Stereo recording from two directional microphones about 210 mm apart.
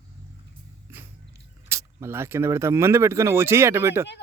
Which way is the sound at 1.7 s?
15° right (ahead or behind).